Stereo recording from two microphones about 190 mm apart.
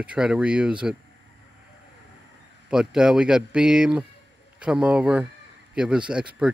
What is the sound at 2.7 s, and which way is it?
Speech, 5° right (ahead or behind).